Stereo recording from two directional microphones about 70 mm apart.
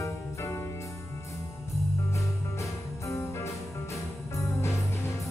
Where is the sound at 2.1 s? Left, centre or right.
Left.